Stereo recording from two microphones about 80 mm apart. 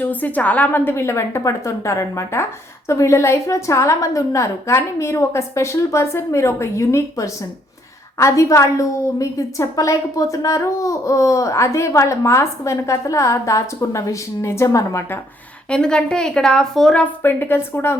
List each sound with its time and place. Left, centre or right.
0.0 s a woman's voice: left
15.7 s a woman's voice: centre
17.2 s a woman's voice: left